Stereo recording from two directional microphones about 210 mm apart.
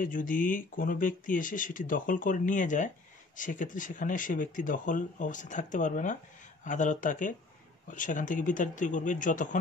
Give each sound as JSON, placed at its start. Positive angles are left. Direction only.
{"t": 0.0, "sound": "speech", "side_deg": 40}